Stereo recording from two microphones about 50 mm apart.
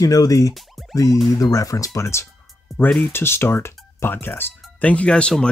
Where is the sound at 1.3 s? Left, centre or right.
Left.